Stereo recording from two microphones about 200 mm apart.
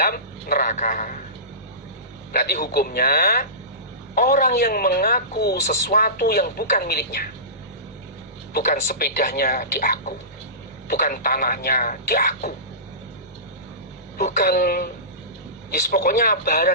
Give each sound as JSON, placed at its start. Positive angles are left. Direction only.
{"t": 0.0, "sound": "a man's voice", "side_deg": 50}
{"t": 2.3, "sound": "speech", "side_deg": 50}
{"t": 8.5, "sound": "speech", "side_deg": 45}
{"t": 14.2, "sound": "speech", "side_deg": 50}
{"t": 15.9, "sound": "speech", "side_deg": 45}